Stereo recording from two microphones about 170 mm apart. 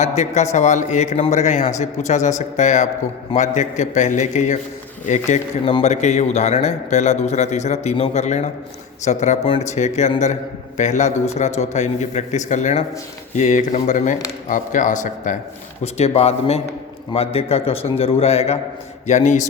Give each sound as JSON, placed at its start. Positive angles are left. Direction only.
{"t": 0.0, "sound": "a man's voice", "side_deg": 40}
{"t": 15.8, "sound": "a man's voice", "side_deg": 40}